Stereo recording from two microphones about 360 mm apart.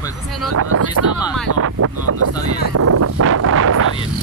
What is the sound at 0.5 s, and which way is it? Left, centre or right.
Speech, right.